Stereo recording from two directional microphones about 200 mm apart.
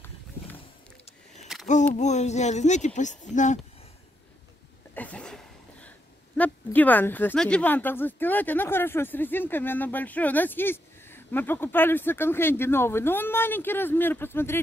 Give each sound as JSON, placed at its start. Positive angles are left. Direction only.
{"t": 1.0, "sound": "a sound", "side_deg": 35}
{"t": 2.0, "sound": "speech", "side_deg": 35}
{"t": 4.9, "sound": "speech", "side_deg": 5}